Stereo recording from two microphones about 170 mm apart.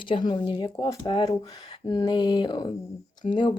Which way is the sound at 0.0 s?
30° left (ahead or behind).